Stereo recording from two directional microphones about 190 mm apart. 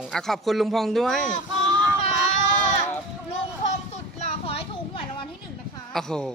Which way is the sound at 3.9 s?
35° left (ahead or behind).